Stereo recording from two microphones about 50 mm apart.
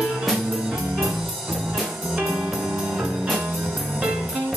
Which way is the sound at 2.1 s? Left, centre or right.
Centre.